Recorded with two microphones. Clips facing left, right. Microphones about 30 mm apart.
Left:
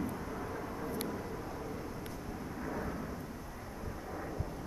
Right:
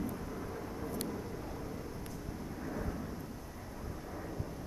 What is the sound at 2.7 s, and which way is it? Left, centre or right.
Vehicle, centre.